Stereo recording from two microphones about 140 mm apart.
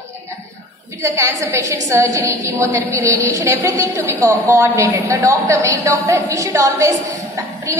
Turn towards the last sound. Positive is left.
turn(degrees=-25)  # may be behind; listen again after turning